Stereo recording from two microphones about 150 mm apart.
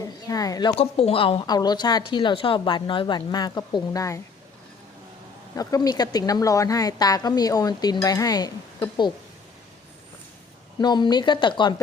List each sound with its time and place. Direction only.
0.0 s speech: 25° left (ahead or behind)
0.8 s speech: 40° left (ahead or behind); by 4.2 s 20° left (ahead or behind)
5.5 s a woman's voice: 25° left (ahead or behind)
10.8 s speech: 30° left (ahead or behind)